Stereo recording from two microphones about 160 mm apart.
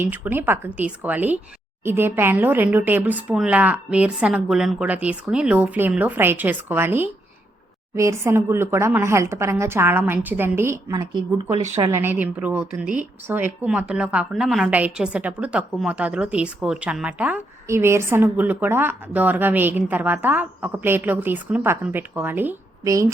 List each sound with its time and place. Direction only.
0.0 s a woman's voice: 10° right (ahead or behind)